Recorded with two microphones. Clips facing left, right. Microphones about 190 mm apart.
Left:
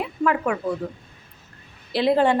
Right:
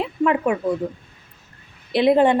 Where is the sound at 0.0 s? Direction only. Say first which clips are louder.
Right 3 dB; 20° right (ahead or behind).